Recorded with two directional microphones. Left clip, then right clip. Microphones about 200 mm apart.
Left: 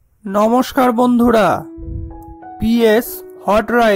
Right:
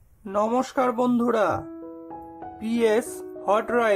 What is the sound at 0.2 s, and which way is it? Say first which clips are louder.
Speech: left 9 dB; 30° left (ahead or behind).